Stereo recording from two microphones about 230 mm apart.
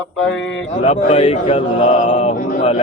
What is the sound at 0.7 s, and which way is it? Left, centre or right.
Speech, left.